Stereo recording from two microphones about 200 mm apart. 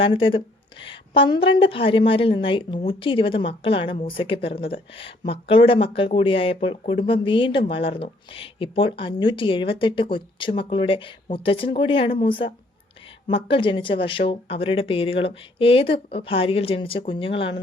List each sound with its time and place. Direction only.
0.0 s speech: 25° left (ahead or behind)